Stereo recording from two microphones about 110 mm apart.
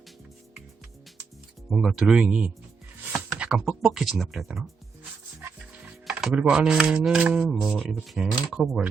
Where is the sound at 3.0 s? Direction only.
10° right (ahead or behind).